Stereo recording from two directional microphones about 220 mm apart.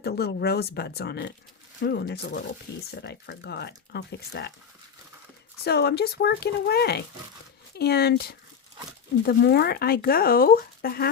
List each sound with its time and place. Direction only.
0.0 s speech: 45° left (ahead or behind)
5.6 s speech: 50° left (ahead or behind)